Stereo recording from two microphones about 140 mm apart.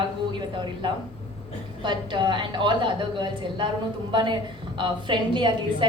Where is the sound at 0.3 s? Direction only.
35° right (ahead or behind).